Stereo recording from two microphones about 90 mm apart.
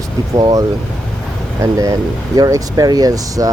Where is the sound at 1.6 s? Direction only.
40° right (ahead or behind).